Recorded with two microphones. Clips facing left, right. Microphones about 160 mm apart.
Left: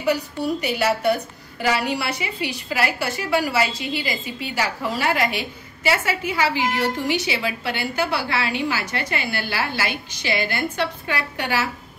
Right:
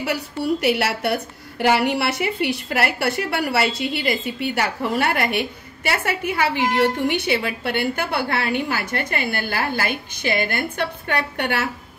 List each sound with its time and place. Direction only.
0.6 s a woman's voice: 70° right (ahead or behind)